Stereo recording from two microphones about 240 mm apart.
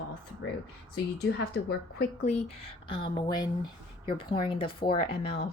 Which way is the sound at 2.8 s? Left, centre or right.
Left.